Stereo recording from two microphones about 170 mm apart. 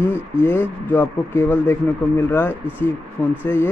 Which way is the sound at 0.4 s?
15° left (ahead or behind).